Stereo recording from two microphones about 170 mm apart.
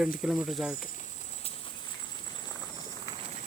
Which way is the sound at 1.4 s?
30° left (ahead or behind).